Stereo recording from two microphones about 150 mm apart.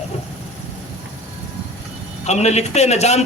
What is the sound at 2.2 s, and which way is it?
A man's voice, 45° left (ahead or behind).